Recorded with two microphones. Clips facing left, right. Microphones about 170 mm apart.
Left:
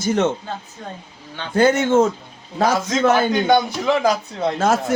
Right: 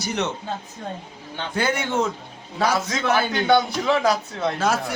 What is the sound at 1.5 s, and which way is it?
Speech, 45° left (ahead or behind).